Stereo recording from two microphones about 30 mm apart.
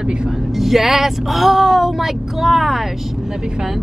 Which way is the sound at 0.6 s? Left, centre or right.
Centre.